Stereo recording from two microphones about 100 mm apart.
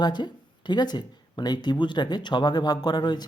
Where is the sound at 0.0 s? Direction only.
45° left (ahead or behind).